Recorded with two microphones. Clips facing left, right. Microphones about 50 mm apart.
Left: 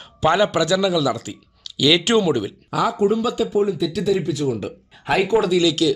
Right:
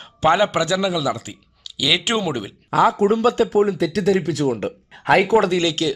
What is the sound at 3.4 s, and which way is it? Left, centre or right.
Speech, right.